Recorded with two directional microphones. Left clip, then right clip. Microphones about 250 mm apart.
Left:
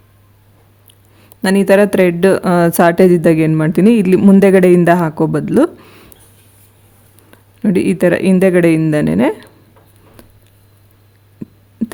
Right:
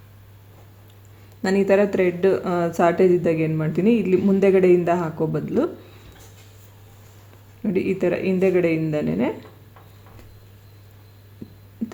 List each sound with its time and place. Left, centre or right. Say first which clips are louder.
1.4 s a woman's voice: left 8 dB; left
7.6 s a woman's voice: left 9 dB; left
11.8 s a sound: left 9 dB; left